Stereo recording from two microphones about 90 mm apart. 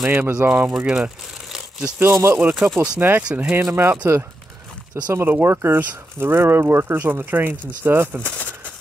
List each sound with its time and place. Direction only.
0.1 s speech: 20° right (ahead or behind)
0.7 s crumpling: 10° right (ahead or behind)
2.0 s speech: 30° right (ahead or behind)
3.0 s speech: 20° right (ahead or behind)
5.1 s speech: 25° right (ahead or behind)